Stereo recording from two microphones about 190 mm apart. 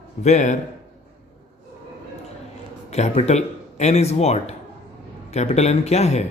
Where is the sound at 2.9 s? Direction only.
35° left (ahead or behind).